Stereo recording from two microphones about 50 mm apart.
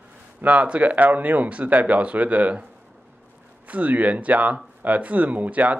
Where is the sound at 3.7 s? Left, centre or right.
Right.